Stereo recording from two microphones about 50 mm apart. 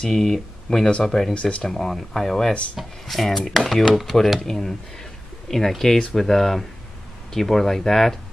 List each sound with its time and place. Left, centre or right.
0.0 s speech: centre
1.3 s speech: left
1.6 s speech: centre